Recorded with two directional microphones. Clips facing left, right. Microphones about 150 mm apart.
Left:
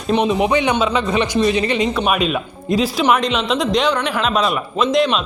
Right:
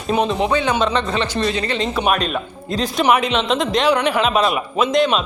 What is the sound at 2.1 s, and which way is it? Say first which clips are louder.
A woman's voice: left 1 dB; 5° left (ahead or behind).